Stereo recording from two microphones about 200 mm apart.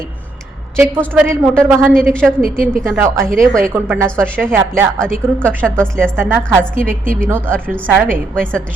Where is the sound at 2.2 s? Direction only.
5° right (ahead or behind).